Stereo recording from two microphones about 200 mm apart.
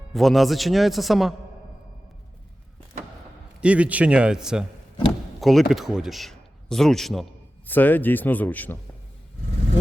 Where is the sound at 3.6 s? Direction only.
5° right (ahead or behind).